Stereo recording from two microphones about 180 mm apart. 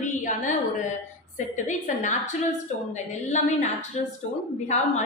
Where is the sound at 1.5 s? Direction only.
45° left (ahead or behind).